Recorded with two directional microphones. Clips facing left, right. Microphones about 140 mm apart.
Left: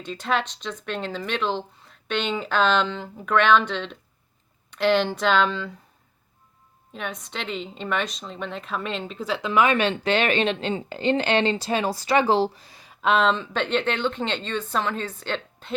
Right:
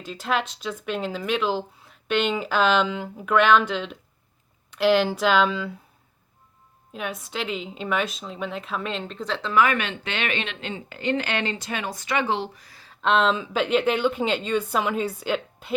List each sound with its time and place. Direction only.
0.0 s speech: 5° right (ahead or behind)
6.9 s speech: 5° right (ahead or behind)
9.5 s a woman's voice: 25° left (ahead or behind)
13.0 s speech: centre (ahead or behind)